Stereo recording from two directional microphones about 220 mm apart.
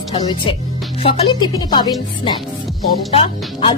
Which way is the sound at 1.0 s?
25° left (ahead or behind).